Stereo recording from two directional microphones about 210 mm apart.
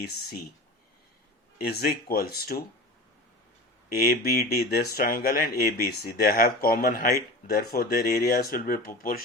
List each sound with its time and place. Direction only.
1.5 s speech: 45° left (ahead or behind)
3.8 s speech: 45° left (ahead or behind)